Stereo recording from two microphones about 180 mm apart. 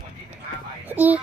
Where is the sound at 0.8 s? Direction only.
10° right (ahead or behind).